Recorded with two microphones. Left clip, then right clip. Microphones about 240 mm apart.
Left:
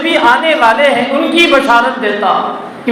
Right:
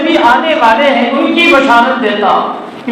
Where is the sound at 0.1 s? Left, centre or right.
Left.